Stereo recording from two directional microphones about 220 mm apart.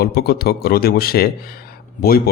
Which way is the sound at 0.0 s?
45° left (ahead or behind).